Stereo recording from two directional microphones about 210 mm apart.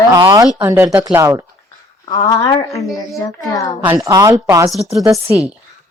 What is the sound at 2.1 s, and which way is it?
Speech, 20° left (ahead or behind).